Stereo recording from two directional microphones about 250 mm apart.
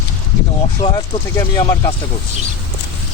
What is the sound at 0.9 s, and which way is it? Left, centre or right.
Speech, centre.